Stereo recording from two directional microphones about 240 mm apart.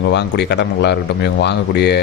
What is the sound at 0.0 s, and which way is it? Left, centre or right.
A man's voice, left.